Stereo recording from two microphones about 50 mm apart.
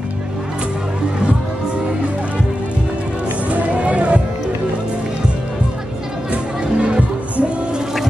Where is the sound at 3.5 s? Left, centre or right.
Right.